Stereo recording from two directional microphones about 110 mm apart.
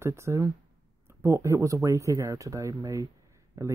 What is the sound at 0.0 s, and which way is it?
Speech, 25° right (ahead or behind).